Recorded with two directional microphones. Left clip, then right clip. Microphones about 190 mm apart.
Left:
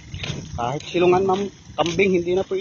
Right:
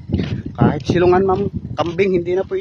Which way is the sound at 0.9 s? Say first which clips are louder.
Right 3 dB; 45° right (ahead or behind).